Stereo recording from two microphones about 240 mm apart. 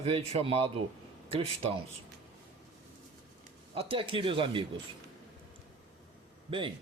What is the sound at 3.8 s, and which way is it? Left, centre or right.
Speech, right.